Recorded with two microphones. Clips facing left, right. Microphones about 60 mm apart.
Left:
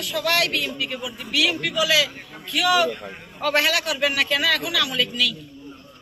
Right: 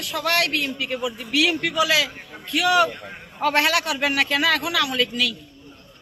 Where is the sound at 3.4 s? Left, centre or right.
Right.